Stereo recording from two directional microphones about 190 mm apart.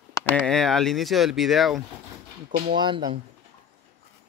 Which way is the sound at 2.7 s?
25° right (ahead or behind).